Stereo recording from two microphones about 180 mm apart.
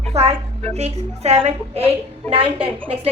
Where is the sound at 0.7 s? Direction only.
35° right (ahead or behind).